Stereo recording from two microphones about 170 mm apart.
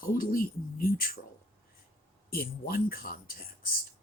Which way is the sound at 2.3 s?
60° left (ahead or behind).